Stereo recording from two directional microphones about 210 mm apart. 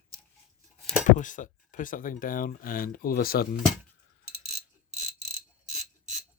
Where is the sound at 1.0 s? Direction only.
40° left (ahead or behind).